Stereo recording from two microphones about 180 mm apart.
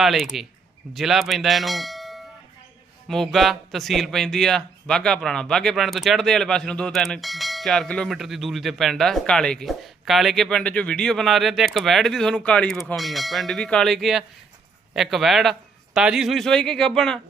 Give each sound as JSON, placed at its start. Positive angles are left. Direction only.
{"t": 0.0, "sound": "speech", "side_deg": 0}